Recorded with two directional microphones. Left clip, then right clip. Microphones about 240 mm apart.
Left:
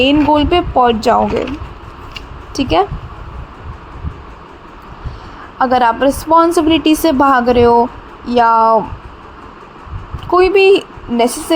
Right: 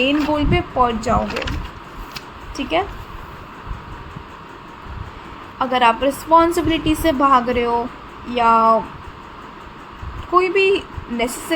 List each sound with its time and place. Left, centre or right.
0.0 s a woman's voice: left
2.6 s speech: left
5.5 s a woman's voice: left
10.3 s a woman's voice: left